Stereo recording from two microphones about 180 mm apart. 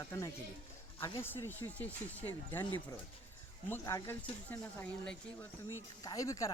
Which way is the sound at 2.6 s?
25° left (ahead or behind).